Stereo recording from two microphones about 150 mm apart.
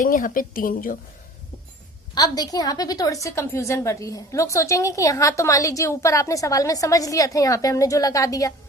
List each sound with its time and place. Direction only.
0.0 s a woman's voice: 65° left (ahead or behind)
2.1 s a woman's voice: 25° left (ahead or behind)